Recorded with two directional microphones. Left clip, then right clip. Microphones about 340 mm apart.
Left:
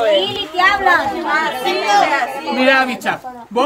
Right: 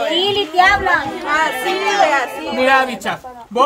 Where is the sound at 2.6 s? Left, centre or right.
Centre.